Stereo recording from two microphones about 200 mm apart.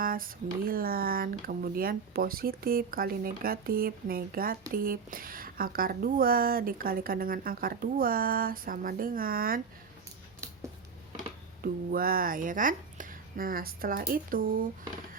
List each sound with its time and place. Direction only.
0.0 s a woman's voice: 45° right (ahead or behind)
11.6 s a woman's voice: 45° right (ahead or behind)